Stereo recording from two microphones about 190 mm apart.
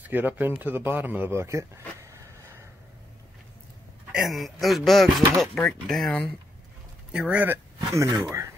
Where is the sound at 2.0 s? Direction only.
15° right (ahead or behind).